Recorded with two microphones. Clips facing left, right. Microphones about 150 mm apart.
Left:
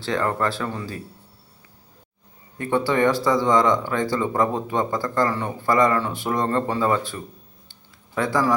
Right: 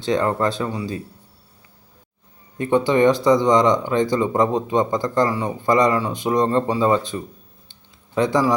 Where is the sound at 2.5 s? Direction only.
20° right (ahead or behind).